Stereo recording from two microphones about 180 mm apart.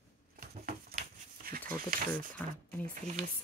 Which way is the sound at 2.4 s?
10° left (ahead or behind).